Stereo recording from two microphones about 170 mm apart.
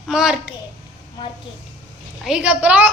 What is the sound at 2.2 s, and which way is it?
Speech, 5° right (ahead or behind).